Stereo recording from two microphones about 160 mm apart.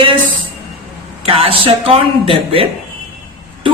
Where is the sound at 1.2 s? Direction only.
35° right (ahead or behind).